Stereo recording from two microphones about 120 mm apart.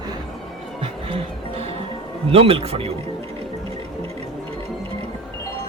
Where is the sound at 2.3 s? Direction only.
50° right (ahead or behind).